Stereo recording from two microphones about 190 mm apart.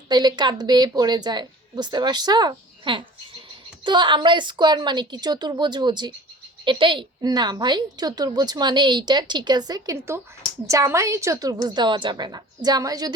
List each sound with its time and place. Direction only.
0.1 s a woman's voice: 20° right (ahead or behind)